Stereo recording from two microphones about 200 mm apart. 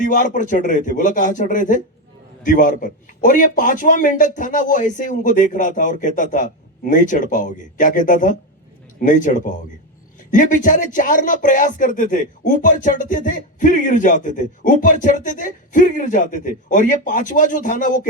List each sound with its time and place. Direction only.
0.0 s a man's voice: 40° left (ahead or behind)